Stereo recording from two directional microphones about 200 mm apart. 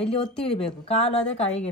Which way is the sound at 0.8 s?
30° left (ahead or behind).